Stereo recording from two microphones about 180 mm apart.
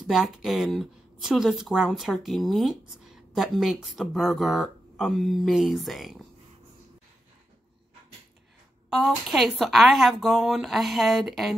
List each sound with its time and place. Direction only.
0.0 s speech: centre (ahead or behind)
9.3 s speech: centre (ahead or behind)